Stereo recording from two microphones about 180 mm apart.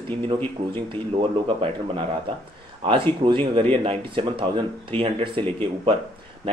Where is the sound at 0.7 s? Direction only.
30° right (ahead or behind).